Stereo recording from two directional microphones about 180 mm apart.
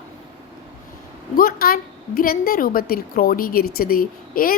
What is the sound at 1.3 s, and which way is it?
A woman's voice, 55° left (ahead or behind).